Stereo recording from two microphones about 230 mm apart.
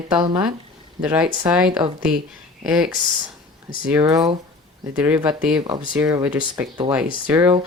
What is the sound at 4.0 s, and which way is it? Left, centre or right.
Speech, centre.